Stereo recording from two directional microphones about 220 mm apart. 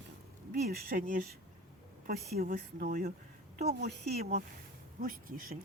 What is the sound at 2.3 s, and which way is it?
Speech, 45° right (ahead or behind).